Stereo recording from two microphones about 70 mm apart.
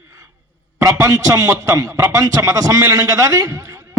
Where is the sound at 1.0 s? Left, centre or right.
Right.